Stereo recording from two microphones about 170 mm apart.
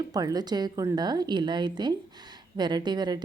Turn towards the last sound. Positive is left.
turn(degrees=-25)  # may be behind; listen again after turning